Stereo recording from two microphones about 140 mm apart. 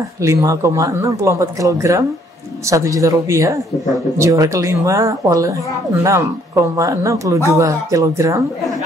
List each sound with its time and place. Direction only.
0.2 s speech: 25° right (ahead or behind)